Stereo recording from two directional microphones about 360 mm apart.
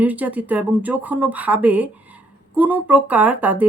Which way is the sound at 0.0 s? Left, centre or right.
Centre.